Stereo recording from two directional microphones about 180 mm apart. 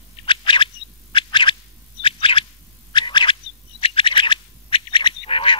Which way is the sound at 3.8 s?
30° left (ahead or behind).